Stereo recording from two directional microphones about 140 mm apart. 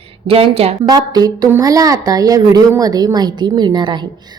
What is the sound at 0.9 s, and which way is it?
A woman's voice, 30° right (ahead or behind).